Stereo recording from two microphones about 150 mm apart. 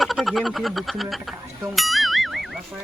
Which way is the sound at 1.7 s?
Centre (ahead or behind).